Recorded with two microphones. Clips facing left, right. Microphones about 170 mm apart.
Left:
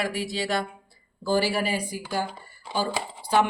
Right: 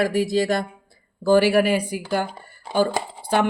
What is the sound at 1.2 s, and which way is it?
Speech, 60° right (ahead or behind).